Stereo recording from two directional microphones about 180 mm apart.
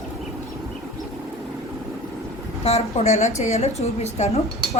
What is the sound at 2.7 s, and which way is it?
A woman's voice, 35° left (ahead or behind).